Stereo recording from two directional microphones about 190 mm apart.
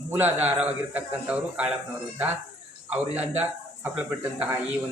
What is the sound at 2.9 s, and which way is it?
Speech, 5° right (ahead or behind).